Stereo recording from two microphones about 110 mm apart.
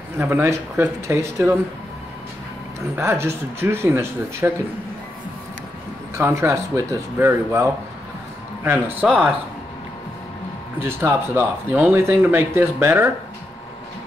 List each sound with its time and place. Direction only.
0.2 s speech: 25° right (ahead or behind)
3.0 s speech: 20° right (ahead or behind)
6.1 s speech: 25° right (ahead or behind)
10.8 s speech: 20° right (ahead or behind)